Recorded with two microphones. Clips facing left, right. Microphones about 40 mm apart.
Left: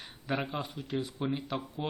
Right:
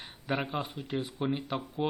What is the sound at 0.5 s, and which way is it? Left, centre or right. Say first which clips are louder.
Speech: right 1 dB; centre.